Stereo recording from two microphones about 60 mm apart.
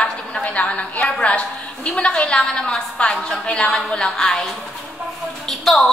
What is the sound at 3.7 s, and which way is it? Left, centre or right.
A woman's voice, centre.